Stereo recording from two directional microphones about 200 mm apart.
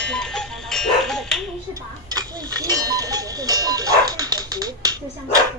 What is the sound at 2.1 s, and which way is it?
Speech, 20° right (ahead or behind).